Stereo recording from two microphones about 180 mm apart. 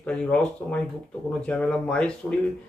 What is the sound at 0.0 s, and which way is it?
Speech, 5° left (ahead or behind).